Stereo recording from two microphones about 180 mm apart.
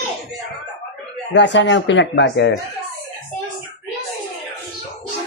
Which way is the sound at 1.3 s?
80° left.